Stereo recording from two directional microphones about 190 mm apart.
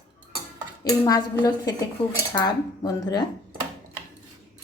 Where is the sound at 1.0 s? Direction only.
20° left (ahead or behind).